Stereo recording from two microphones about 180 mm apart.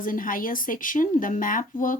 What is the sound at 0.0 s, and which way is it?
Speech, 50° left (ahead or behind).